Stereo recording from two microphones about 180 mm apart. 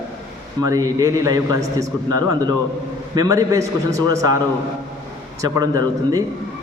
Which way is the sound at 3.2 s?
20° right (ahead or behind).